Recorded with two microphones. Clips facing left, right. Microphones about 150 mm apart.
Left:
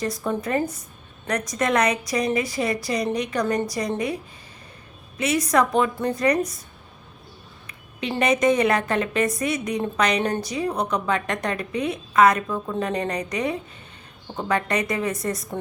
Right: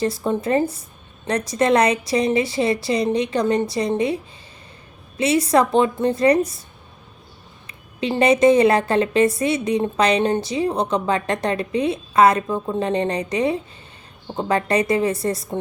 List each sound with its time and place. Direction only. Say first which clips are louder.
0.0 s a woman's voice: right 4 dB; 25° right (ahead or behind)
7.7 s a woman's voice: right 5 dB; 30° right (ahead or behind)